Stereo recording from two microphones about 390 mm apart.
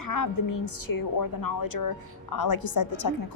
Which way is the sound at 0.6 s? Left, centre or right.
Left.